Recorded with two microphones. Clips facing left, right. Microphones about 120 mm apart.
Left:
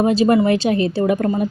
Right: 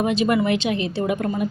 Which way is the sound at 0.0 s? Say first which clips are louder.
Left 5 dB; 35° left (ahead or behind).